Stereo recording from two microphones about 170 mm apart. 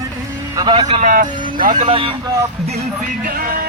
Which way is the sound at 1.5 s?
55° right (ahead or behind).